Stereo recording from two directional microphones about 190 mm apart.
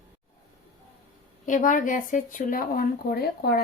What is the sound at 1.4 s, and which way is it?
Speech, 45° left (ahead or behind).